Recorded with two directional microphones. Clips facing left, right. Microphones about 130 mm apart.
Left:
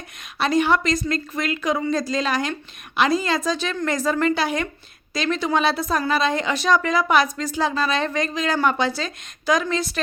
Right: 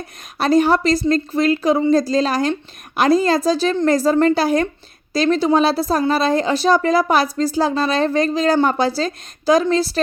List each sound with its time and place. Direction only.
0.3 s a woman's voice: 40° right (ahead or behind)